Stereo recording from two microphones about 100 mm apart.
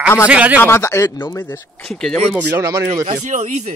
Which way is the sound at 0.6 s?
25° left (ahead or behind).